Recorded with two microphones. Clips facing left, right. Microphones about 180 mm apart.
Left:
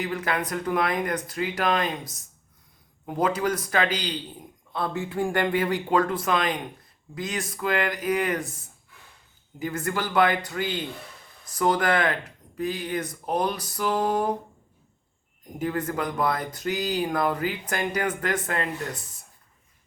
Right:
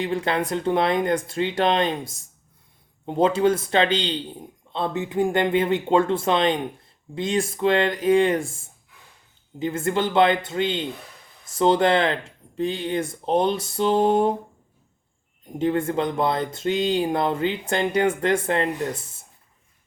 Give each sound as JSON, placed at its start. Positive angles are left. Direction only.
{"t": 0.0, "sound": "speech", "side_deg": -30}
{"t": 15.5, "sound": "speech", "side_deg": -25}